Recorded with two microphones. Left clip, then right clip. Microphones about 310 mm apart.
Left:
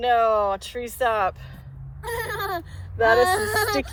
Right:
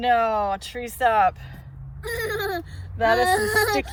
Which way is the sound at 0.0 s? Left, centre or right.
Centre.